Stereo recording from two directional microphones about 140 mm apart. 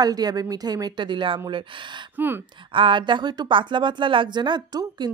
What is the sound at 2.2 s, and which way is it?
Speech, 15° right (ahead or behind).